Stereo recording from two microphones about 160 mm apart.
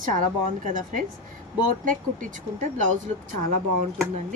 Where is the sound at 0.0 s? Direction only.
55° right (ahead or behind).